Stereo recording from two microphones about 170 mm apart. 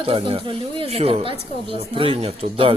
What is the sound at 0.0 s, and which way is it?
A woman's voice, 30° right (ahead or behind).